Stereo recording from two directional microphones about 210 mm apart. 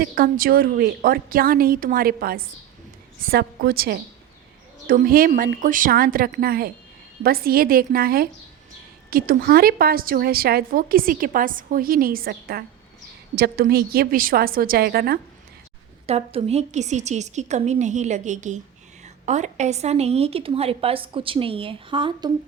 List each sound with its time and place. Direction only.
0.0 s a woman's voice: 45° right (ahead or behind)
16.0 s a woman's voice: 30° right (ahead or behind)